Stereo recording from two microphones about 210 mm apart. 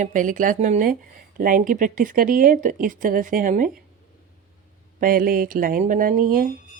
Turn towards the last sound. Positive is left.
turn(degrees=-40)  # may be behind; listen again after turning